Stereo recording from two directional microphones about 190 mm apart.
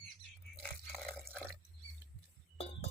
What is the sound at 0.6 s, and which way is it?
Biting, centre (ahead or behind).